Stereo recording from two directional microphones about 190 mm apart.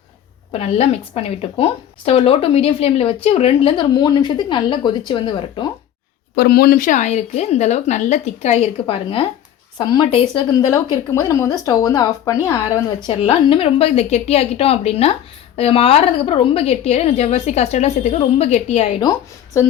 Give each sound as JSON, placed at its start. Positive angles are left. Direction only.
{"t": 0.6, "sound": "a woman's voice", "side_deg": 30}
{"t": 6.3, "sound": "a woman's voice", "side_deg": 55}